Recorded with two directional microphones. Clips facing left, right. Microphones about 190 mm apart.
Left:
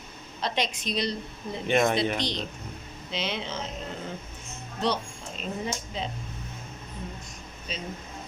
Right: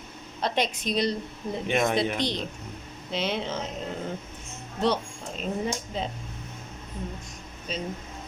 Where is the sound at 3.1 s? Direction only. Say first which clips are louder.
Right 3 dB; 50° right (ahead or behind).